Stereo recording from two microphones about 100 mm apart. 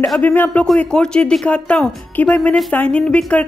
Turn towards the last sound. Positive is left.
turn(degrees=10)  # may be behind; listen again after turning